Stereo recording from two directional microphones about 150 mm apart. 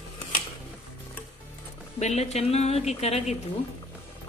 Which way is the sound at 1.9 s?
45° left (ahead or behind).